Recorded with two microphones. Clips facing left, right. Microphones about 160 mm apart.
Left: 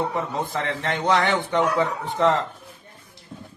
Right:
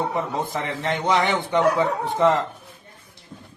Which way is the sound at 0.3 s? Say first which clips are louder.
Even; 15° right (ahead or behind).